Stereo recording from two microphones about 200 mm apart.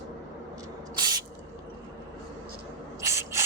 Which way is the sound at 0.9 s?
20° right (ahead or behind).